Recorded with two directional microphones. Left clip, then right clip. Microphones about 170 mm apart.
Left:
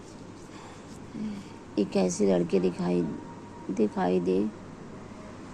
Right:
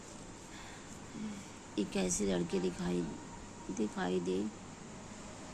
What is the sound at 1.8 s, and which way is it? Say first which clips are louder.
Speech: left 10 dB; 5° left (ahead or behind).